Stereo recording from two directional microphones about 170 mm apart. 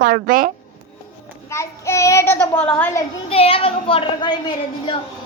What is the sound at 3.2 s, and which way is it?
A woman's voice, 35° left (ahead or behind).